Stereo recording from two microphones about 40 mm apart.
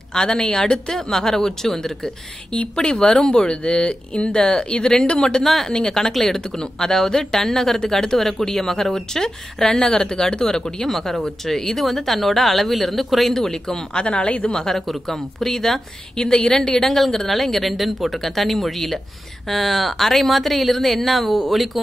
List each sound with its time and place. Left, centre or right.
0.1 s a woman's voice: centre
5.9 s a woman's voice: centre
10.9 s speech: centre
13.9 s speech: left
14.5 s a woman's voice: centre